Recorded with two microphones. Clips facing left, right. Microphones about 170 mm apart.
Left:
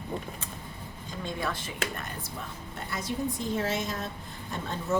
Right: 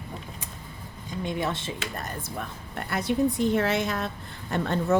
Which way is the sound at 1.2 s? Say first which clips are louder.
Right 4 dB; 20° right (ahead or behind).